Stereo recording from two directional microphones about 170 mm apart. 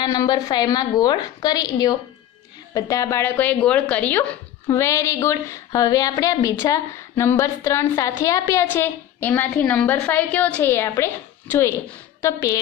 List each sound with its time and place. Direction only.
0.0 s a woman's voice: 20° left (ahead or behind)
12.2 s speech: 20° left (ahead or behind)